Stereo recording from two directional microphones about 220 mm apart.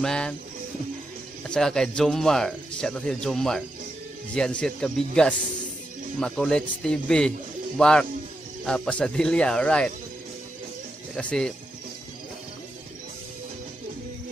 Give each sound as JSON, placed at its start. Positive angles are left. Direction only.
{"t": 0.0, "sound": "speech", "side_deg": 5}
{"t": 1.5, "sound": "speech", "side_deg": 5}
{"t": 11.1, "sound": "speech", "side_deg": 5}